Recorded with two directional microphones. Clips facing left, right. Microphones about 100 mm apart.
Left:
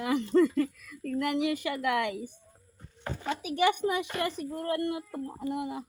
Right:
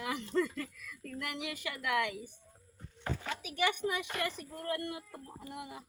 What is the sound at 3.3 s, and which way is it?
A woman's voice, 25° left (ahead or behind).